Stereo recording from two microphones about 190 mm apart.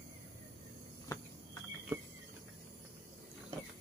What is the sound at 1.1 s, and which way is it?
Cricket, 15° left (ahead or behind).